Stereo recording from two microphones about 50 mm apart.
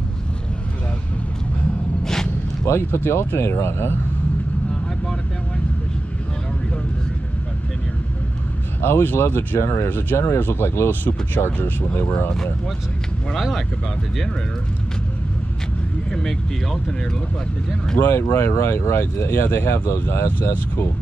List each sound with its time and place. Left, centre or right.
2.6 s speech: left
9.0 s speech: left
10.1 s speech: left
10.9 s speech: left
16.1 s speech: centre
18.0 s speech: left
20.3 s speech: left